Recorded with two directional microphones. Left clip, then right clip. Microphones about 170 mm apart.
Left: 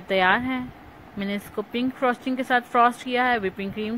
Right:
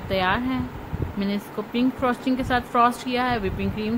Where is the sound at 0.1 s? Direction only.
30° left (ahead or behind).